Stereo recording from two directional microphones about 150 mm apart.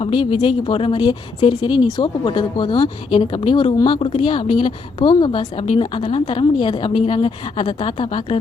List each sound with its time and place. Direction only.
0.0 s speech: 35° left (ahead or behind)